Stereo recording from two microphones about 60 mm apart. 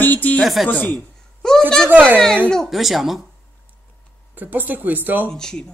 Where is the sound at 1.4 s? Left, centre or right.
Centre.